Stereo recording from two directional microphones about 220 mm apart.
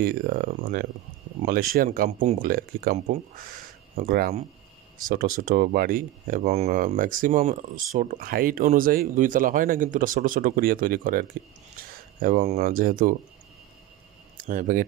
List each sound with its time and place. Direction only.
0.0 s speech: 40° right (ahead or behind)
14.3 s speech: 35° right (ahead or behind)